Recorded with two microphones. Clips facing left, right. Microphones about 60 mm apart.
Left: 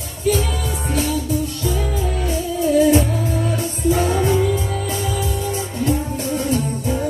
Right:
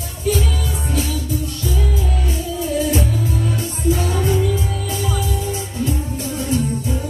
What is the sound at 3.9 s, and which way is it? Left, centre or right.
Music, left.